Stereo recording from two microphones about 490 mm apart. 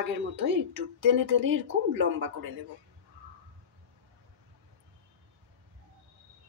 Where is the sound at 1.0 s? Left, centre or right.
Right.